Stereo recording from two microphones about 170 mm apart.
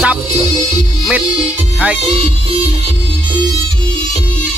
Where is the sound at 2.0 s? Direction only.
35° right (ahead or behind).